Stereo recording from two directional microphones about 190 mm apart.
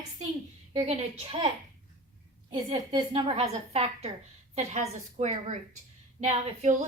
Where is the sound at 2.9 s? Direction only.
30° right (ahead or behind).